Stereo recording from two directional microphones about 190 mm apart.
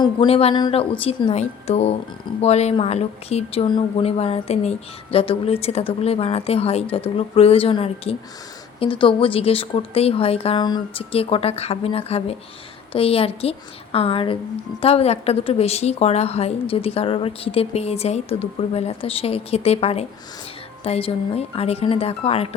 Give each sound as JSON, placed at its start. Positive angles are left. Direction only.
{"t": 0.0, "sound": "a woman's voice", "side_deg": 25}